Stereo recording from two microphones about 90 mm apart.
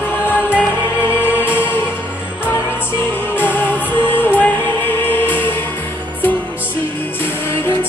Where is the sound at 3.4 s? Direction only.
20° left (ahead or behind).